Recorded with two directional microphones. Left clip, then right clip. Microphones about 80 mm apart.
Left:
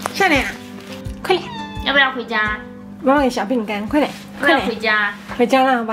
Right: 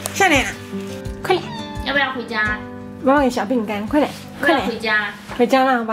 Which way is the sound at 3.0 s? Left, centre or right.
Centre.